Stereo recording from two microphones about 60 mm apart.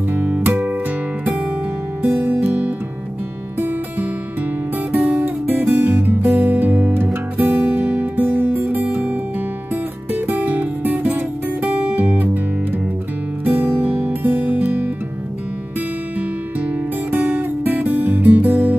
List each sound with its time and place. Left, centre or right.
0.1 s music: right
3.5 s music: right
4.9 s music: centre
13.4 s music: right
17.4 s music: right